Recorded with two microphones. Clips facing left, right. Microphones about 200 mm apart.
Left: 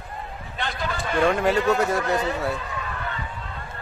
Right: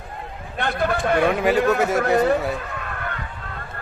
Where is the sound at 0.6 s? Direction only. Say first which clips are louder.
Right 7 dB; 60° right (ahead or behind).